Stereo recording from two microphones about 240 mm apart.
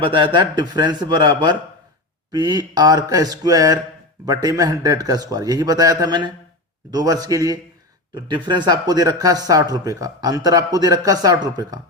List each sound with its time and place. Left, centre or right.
0.0 s speech: right